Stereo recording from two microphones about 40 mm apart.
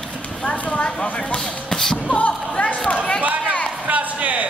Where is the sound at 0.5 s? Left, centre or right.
Left.